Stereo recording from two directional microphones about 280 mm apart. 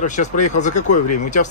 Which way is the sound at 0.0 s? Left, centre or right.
Left.